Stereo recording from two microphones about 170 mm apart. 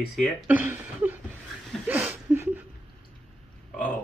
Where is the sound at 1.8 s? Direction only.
10° right (ahead or behind).